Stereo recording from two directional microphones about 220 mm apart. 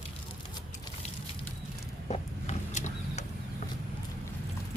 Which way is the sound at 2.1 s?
30° left (ahead or behind).